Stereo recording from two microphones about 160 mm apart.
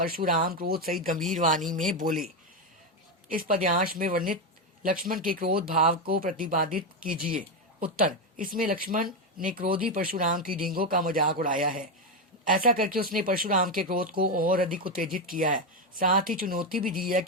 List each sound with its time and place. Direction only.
0.0 s speech: 65° right (ahead or behind)